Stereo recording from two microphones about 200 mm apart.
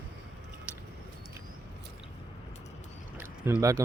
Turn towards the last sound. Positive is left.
turn(degrees=-15)  # may be behind; listen again after turning